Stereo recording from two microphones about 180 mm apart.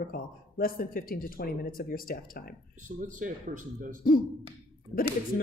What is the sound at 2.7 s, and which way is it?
Speech, 45° right (ahead or behind).